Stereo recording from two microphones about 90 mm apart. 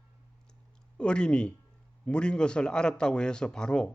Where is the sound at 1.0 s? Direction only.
10° left (ahead or behind).